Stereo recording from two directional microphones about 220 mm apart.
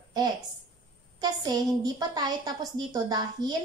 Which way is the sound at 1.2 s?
20° right (ahead or behind).